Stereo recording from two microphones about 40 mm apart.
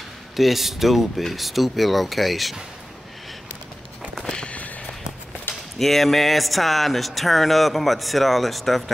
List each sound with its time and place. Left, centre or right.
0.4 s speech: centre
4.2 s a sound: centre
5.5 s speech: centre